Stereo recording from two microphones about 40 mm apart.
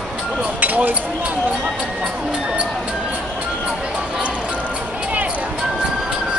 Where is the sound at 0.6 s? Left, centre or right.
Right.